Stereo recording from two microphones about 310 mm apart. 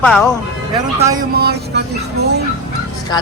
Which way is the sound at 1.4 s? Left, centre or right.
Right.